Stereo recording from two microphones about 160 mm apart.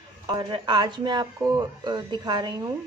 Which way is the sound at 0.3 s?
25° right (ahead or behind).